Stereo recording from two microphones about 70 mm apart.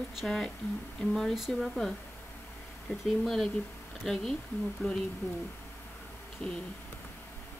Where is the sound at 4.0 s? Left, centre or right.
Centre.